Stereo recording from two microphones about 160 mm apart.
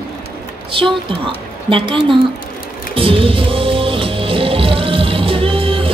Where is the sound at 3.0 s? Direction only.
35° right (ahead or behind).